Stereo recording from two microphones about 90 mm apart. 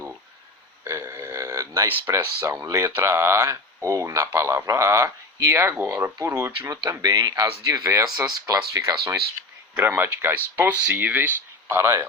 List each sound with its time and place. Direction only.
0.9 s burping: 30° right (ahead or behind)
2.0 s speech: 30° right (ahead or behind)
7.0 s speech: 50° right (ahead or behind)
9.7 s speech: 25° right (ahead or behind)